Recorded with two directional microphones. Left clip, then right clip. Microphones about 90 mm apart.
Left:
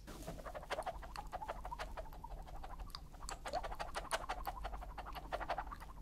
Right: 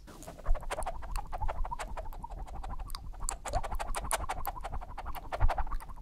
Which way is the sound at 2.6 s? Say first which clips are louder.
Right 6 dB; 55° right (ahead or behind).